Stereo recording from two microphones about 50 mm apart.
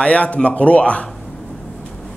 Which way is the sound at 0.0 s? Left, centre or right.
Left.